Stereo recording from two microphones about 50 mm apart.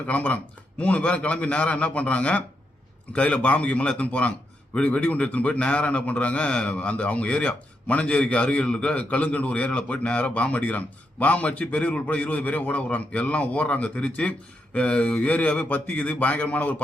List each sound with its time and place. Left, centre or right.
0.1 s a man's voice: left